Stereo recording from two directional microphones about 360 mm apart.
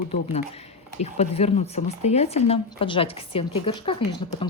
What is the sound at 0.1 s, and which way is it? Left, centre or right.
Speech, centre.